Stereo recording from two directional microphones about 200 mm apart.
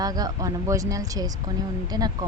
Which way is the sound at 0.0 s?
20° right (ahead or behind).